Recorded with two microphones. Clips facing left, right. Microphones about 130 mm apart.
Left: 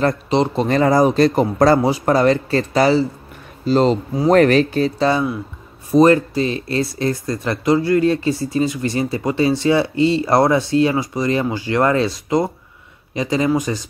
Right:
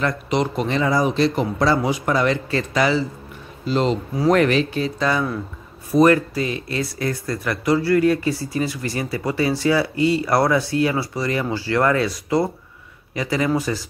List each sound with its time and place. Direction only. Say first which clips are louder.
0.0 s speech: left 4 dB; 30° left (ahead or behind)
0.7 s a man's voice: left 8 dB; 45° left (ahead or behind); by 13.8 s 20° left (ahead or behind)